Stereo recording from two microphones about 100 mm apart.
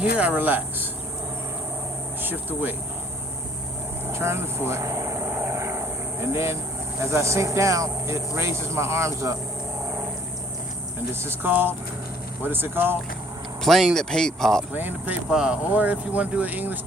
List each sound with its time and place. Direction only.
0.0 s speech: 15° right (ahead or behind)
4.1 s vehicle: 25° right (ahead or behind)
7.0 s speech: 30° right (ahead or behind)
11.1 s speech: 25° right (ahead or behind)
13.6 s speech: centre (ahead or behind)
14.7 s speech: 15° right (ahead or behind)